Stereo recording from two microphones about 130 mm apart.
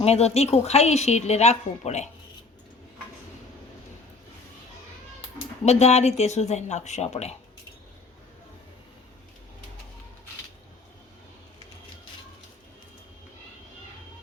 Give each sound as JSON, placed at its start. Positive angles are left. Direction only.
{"t": 0.0, "sound": "a woman's voice", "side_deg": 55}
{"t": 5.6, "sound": "a woman's voice", "side_deg": 55}